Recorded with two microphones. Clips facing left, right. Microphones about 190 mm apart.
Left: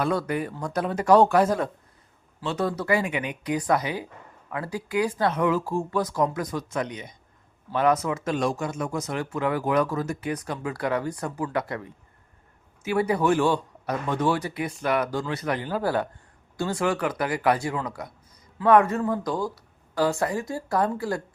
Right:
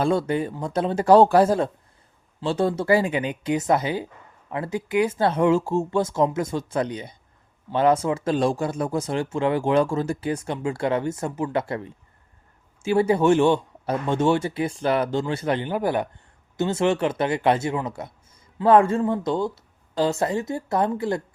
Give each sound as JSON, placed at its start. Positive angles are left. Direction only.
{"t": 0.0, "sound": "speech", "side_deg": -25}